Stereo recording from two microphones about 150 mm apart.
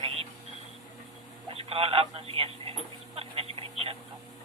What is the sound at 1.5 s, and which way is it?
Speech, 40° right (ahead or behind).